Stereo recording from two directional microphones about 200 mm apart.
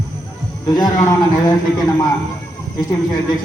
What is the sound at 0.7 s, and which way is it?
A man's voice, 20° left (ahead or behind).